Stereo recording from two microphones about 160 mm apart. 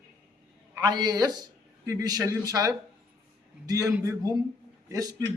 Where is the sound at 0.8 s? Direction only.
25° right (ahead or behind).